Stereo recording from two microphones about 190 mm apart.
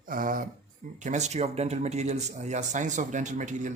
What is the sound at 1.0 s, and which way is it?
Speech, 40° right (ahead or behind).